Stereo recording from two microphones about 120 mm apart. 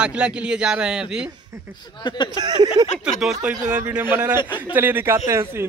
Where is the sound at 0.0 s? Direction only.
10° right (ahead or behind).